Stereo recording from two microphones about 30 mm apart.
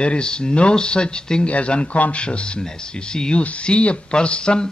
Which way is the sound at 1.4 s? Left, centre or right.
Left.